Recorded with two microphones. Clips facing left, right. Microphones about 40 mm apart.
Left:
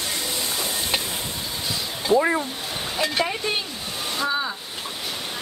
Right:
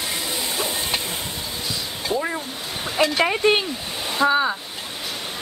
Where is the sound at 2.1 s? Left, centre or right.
Centre.